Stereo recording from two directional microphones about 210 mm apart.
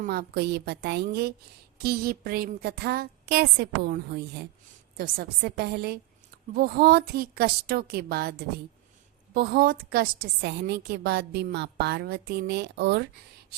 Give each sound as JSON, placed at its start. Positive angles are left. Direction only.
{"t": 0.0, "sound": "a woman's voice", "side_deg": -45}